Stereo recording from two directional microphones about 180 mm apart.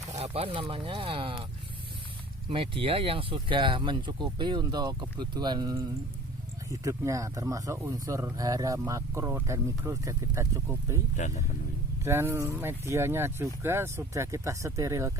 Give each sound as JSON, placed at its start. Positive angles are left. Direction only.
{"t": 0.1, "sound": "speech", "side_deg": -35}
{"t": 2.5, "sound": "speech", "side_deg": -30}
{"t": 12.0, "sound": "speech", "side_deg": -15}